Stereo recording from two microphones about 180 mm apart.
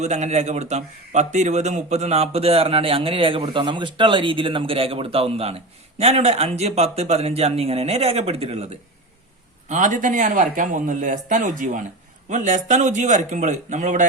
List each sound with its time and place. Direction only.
0.0 s a man's voice: 40° right (ahead or behind)
9.6 s a man's voice: 45° right (ahead or behind)